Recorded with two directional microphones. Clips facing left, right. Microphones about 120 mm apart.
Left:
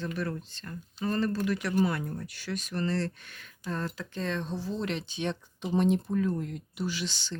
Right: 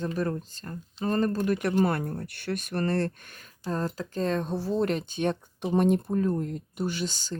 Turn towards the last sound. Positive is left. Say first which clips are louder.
# right 3 dB
turn(degrees=-45)  # may be behind; listen again after turning